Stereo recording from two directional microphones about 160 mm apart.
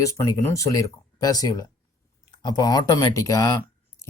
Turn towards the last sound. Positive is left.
turn(degrees=20)  # may be behind; listen again after turning